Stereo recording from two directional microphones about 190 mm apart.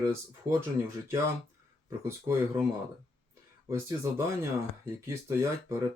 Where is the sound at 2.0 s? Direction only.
15° right (ahead or behind).